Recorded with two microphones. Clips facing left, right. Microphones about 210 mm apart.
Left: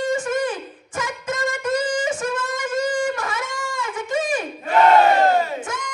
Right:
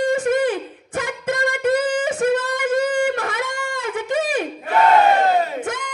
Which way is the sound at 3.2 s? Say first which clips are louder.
Right 3 dB; 60° right (ahead or behind).